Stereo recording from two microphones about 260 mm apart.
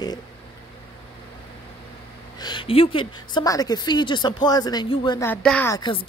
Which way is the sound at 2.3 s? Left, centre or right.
Centre.